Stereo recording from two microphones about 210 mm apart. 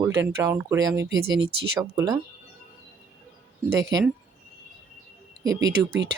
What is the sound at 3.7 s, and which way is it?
Speech, 15° right (ahead or behind).